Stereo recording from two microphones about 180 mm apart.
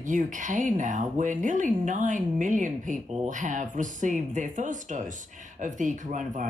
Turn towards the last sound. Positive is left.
turn(degrees=-45)  # may be behind; listen again after turning